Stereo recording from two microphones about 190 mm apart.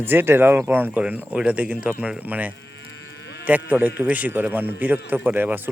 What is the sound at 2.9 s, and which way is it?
Livestock, 65° left (ahead or behind).